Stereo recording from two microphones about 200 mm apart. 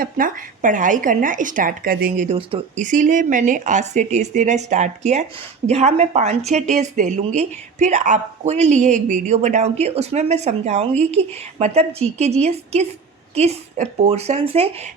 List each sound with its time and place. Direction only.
0.0 s speech: 45° right (ahead or behind)